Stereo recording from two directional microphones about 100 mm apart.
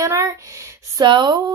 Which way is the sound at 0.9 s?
50° right (ahead or behind).